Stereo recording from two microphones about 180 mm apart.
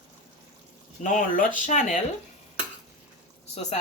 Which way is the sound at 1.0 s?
45° left (ahead or behind).